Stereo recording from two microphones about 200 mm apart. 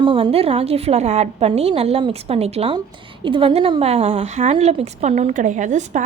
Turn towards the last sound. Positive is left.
turn(degrees=-35)  # may be behind; listen again after turning